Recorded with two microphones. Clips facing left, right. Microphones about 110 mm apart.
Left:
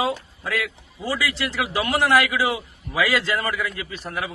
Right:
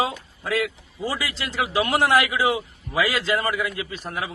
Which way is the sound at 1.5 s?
20° right (ahead or behind).